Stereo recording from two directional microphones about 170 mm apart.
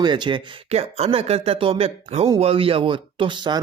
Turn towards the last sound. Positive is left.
turn(degrees=-25)  # may be behind; listen again after turning